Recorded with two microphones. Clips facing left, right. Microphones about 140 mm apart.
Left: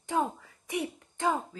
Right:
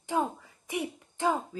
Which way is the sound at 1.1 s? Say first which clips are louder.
Right 1 dB; 5° right (ahead or behind).